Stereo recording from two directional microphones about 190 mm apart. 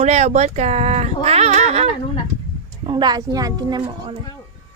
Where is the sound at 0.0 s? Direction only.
35° right (ahead or behind).